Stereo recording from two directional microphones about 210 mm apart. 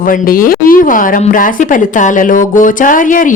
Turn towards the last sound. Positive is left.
turn(degrees=40)  # may be behind; listen again after turning